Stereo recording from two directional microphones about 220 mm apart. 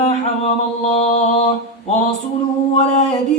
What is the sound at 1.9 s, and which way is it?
Speech, 30° left (ahead or behind).